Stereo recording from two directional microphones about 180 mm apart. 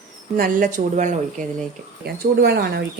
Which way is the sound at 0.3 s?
50° right (ahead or behind).